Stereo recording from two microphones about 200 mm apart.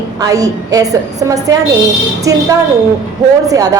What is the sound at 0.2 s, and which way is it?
A woman's voice, 15° right (ahead or behind).